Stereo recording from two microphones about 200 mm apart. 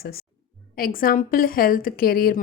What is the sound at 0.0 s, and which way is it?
A woman's voice, 50° left (ahead or behind).